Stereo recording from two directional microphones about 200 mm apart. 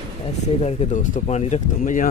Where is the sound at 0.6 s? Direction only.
35° left (ahead or behind).